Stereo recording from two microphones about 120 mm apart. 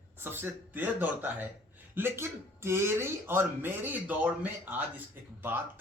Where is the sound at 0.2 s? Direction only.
20° right (ahead or behind).